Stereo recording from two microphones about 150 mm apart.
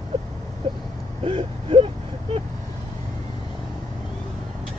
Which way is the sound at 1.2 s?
40° right (ahead or behind).